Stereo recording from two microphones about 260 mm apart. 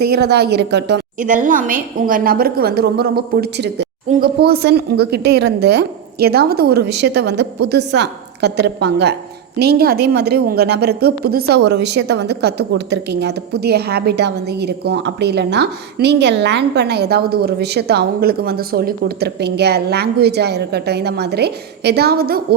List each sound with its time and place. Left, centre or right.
0.0 s a woman's voice: right